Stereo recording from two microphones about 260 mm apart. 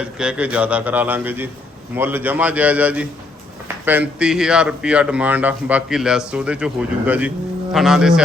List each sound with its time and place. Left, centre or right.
0.2 s speech: centre